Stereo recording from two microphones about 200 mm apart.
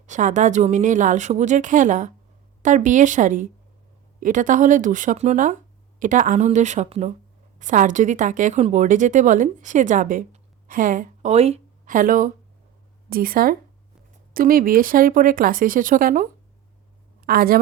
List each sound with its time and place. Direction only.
0.0 s a woman's voice: 40° right (ahead or behind)